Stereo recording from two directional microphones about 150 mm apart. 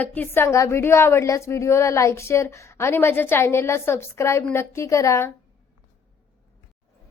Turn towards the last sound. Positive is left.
turn(degrees=20)  # may be behind; listen again after turning